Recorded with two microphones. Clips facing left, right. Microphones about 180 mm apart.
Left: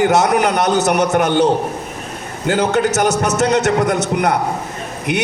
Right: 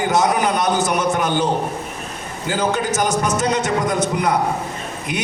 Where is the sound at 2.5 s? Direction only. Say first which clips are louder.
Left 5 dB; 70° left (ahead or behind).